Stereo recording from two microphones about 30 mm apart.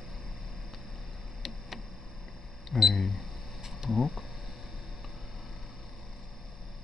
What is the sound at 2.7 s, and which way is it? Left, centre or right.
Camera, centre.